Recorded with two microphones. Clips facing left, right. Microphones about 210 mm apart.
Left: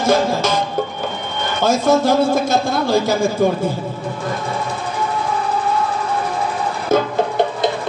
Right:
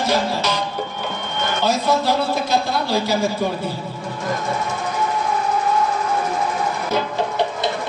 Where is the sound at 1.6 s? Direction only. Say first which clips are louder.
Left 5 dB; 50° left (ahead or behind).